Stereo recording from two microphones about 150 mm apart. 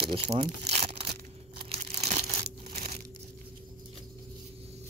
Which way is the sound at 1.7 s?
45° right (ahead or behind).